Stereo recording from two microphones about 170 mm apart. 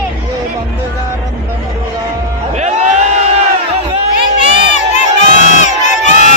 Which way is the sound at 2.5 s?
40° right (ahead or behind).